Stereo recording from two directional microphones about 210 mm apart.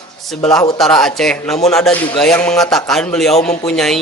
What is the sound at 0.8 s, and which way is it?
A man's voice, 5° left (ahead or behind).